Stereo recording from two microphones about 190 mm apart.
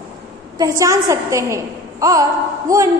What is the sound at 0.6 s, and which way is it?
A woman's voice, 15° right (ahead or behind).